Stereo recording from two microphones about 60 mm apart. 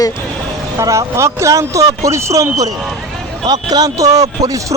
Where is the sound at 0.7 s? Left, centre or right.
Right.